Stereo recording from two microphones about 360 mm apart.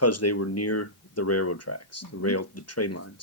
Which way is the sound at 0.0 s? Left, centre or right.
Left.